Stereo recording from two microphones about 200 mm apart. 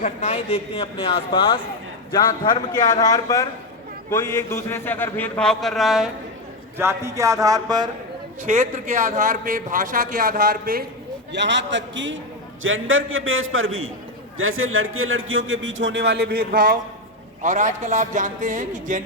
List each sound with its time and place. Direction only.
0.0 s a man's voice: 35° left (ahead or behind); by 3.4 s 20° left (ahead or behind)
4.7 s speech: 10° left (ahead or behind)
6.7 s a sound: 15° right (ahead or behind)
8.4 s a man's voice: 40° right (ahead or behind)
11.3 s a man's voice: 60° right (ahead or behind); by 19.0 s 40° right (ahead or behind)